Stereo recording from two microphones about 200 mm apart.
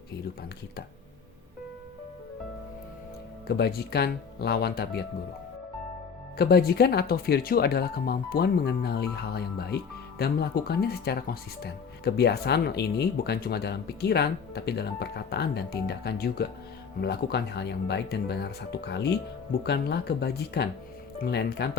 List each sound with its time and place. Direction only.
3.4 s speech: 55° left (ahead or behind)
6.3 s speech: 50° left (ahead or behind)